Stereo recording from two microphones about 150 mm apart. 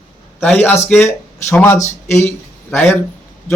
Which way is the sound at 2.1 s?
10° left (ahead or behind).